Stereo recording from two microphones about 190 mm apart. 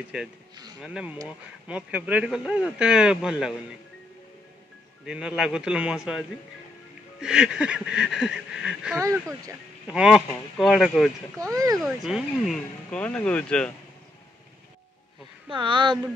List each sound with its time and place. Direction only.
0.7 s speech: 5° right (ahead or behind)
5.0 s speech: 5° right (ahead or behind)
8.9 s speech: 15° right (ahead or behind)
9.8 s speech: 5° right (ahead or behind)
11.4 s speech: 20° right (ahead or behind)
11.8 s speech: centre (ahead or behind)
15.4 s speech: 25° right (ahead or behind)